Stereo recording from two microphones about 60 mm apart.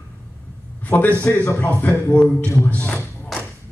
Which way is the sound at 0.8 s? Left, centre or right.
Left.